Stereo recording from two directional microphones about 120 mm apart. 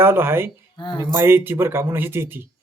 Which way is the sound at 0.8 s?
40° left (ahead or behind).